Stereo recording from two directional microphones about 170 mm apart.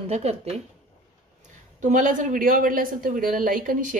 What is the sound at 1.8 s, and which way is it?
Speech, 50° right (ahead or behind).